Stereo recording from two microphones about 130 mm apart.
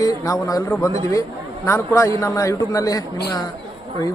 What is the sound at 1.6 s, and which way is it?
A man's voice, 20° left (ahead or behind).